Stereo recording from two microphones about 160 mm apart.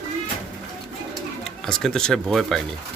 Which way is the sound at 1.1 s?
5° left (ahead or behind).